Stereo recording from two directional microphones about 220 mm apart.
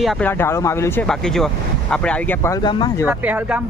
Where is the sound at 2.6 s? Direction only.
20° left (ahead or behind).